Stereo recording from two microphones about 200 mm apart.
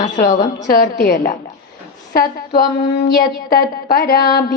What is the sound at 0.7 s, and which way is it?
Music, 50° left (ahead or behind).